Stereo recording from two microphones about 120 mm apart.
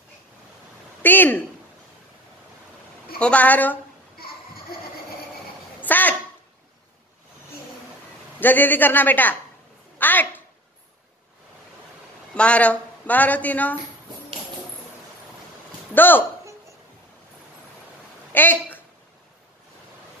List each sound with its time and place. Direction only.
1.0 s speech: 15° left (ahead or behind)
3.2 s speech: 10° left (ahead or behind)
5.8 s a sound: 15° left (ahead or behind)
8.4 s speech: 15° left (ahead or behind)
9.9 s a sound: 15° left (ahead or behind)
12.4 s speech: 10° left (ahead or behind)
15.9 s speech: 15° left (ahead or behind)
18.3 s a woman's voice: 15° left (ahead or behind)